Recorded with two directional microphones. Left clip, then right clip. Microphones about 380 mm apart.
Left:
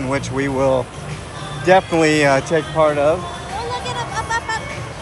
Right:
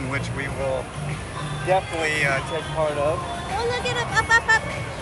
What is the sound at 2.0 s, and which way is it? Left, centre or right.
Speech, centre.